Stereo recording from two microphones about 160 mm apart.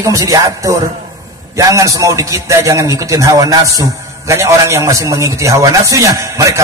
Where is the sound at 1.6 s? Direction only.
20° right (ahead or behind).